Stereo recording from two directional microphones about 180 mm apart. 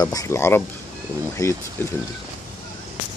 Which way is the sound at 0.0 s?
20° left (ahead or behind).